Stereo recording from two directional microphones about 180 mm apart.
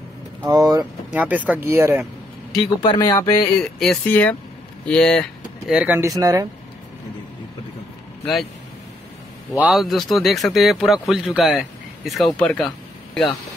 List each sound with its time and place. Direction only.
0.5 s speech: 20° right (ahead or behind)
1.1 s speech: 10° right (ahead or behind)
2.6 s speech: 25° left (ahead or behind)
3.8 s a man's voice: 5° left (ahead or behind)
5.7 s speech: 5° right (ahead or behind)
9.5 s a man's voice: centre (ahead or behind)